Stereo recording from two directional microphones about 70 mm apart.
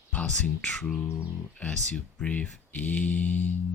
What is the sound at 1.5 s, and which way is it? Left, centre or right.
Speech, centre.